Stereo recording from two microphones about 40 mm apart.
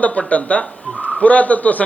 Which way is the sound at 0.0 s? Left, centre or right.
Left.